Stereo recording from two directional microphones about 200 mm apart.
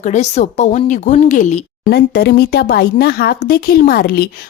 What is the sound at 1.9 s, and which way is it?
Speech, 55° left (ahead or behind).